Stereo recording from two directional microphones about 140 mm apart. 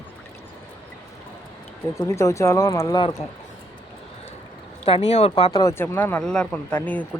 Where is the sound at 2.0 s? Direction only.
20° left (ahead or behind).